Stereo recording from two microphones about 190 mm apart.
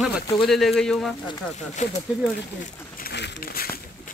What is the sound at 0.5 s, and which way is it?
Speech, centre (ahead or behind).